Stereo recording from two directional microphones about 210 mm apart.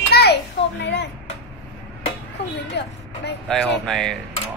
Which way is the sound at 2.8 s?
55° left (ahead or behind).